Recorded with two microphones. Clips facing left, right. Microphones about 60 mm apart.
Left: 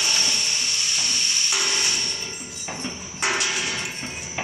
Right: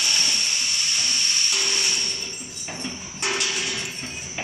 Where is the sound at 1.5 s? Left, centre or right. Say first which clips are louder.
Left 4 dB; centre.